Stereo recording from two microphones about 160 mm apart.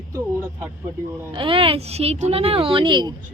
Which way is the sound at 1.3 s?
35° right (ahead or behind).